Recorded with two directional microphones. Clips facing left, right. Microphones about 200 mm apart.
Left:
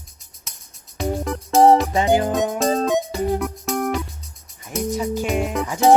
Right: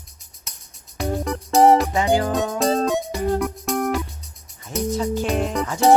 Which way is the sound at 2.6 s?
Centre (ahead or behind).